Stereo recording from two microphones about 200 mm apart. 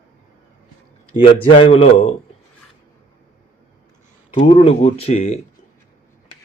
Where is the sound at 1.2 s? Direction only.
30° left (ahead or behind).